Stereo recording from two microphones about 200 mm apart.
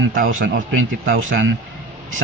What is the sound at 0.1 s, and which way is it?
Speech, 45° right (ahead or behind).